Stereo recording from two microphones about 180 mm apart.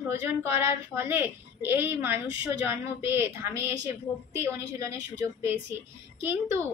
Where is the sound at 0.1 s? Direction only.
15° right (ahead or behind).